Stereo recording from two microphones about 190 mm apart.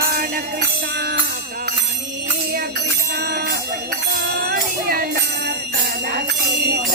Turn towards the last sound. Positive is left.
turn(degrees=-50)  # may be behind; listen again after turning